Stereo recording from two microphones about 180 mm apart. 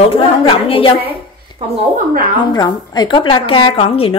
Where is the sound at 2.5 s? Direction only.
25° left (ahead or behind).